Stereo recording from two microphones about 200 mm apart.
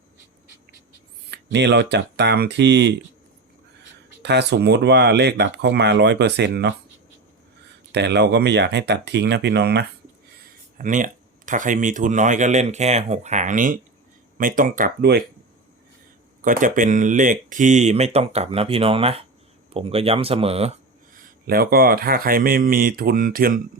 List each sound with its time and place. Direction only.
1.3 s speech: 60° right (ahead or behind)
4.2 s speech: 60° right (ahead or behind)
7.9 s speech: 60° right (ahead or behind)
10.8 s speech: 40° right (ahead or behind)
16.4 s speech: 40° right (ahead or behind)
21.1 s speech: 45° right (ahead or behind)